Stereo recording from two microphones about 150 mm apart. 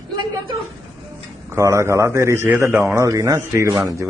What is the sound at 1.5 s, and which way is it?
A man's voice, 20° right (ahead or behind).